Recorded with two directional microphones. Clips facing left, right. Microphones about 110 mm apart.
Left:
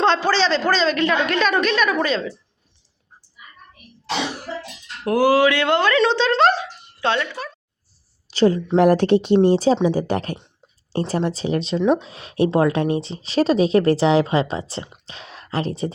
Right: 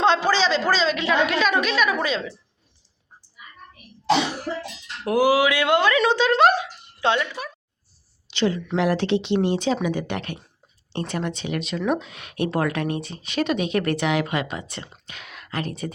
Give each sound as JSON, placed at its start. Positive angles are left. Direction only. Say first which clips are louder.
{"t": 0.0, "sound": "a woman's voice", "louder": "left 1 dB", "side_deg": -10}
{"t": 5.0, "sound": "speech", "louder": "left 3 dB", "side_deg": -10}
{"t": 8.3, "sound": "speech", "louder": "left 6 dB", "side_deg": 40}